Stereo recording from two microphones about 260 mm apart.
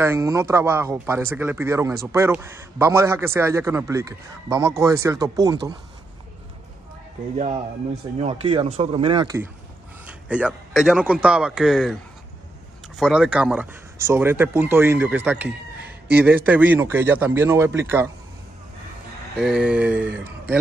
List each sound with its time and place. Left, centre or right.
0.0 s a man's voice: centre
8.2 s a man's voice: right
19.3 s a man's voice: centre